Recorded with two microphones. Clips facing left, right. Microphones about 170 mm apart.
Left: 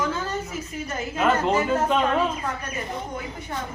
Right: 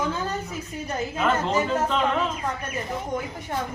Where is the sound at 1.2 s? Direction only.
10° left (ahead or behind).